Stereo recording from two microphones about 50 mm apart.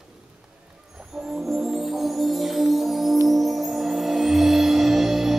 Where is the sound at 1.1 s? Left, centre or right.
Centre.